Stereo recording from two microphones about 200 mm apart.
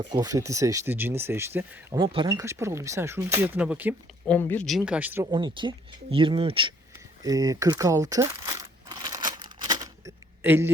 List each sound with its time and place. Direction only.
0.0 s speech: 20° right (ahead or behind)
2.0 s speech: 20° right (ahead or behind); by 3.9 s 5° right (ahead or behind)
4.3 s speech: 10° left (ahead or behind); by 5.2 s 10° right (ahead or behind)
5.2 s speech: 25° right (ahead or behind)
8.9 s crumpling: 20° right (ahead or behind)
10.4 s speech: 10° right (ahead or behind)